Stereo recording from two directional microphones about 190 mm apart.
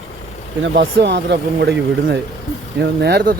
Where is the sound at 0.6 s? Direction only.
55° right (ahead or behind).